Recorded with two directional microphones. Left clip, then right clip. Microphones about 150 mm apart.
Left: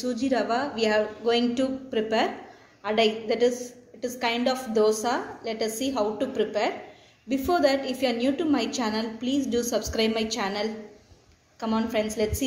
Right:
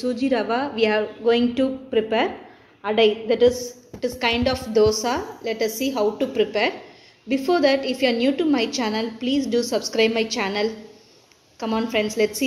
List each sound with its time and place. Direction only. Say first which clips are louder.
0.0 s a woman's voice: right 4 dB; 40° right (ahead or behind)